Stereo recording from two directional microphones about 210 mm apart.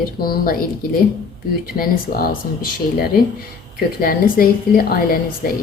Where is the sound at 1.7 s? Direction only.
45° left (ahead or behind).